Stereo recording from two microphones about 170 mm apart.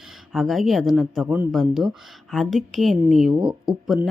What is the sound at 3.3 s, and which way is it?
Speech, 30° right (ahead or behind).